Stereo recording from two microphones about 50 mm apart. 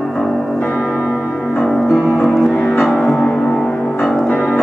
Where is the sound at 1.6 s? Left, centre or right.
Centre.